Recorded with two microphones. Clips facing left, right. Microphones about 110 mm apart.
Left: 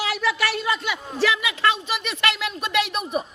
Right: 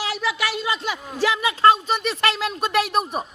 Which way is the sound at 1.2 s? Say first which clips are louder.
Right 5 dB; 30° right (ahead or behind).